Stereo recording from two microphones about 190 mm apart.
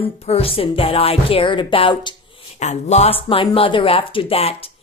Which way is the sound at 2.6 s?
35° left (ahead or behind).